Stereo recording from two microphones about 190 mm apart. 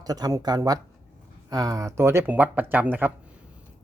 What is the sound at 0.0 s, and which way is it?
Speech, 20° right (ahead or behind).